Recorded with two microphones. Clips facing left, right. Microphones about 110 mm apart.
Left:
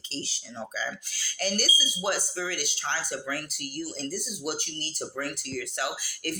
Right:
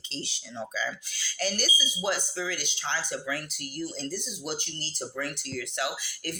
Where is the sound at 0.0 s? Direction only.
35° left (ahead or behind).